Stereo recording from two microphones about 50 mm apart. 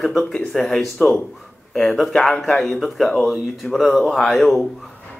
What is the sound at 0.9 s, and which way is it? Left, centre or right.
Speech, left.